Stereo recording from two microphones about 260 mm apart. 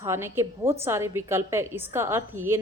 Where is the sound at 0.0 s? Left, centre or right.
Centre.